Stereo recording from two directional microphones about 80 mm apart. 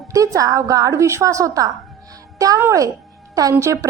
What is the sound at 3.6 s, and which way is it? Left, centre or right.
Speech, right.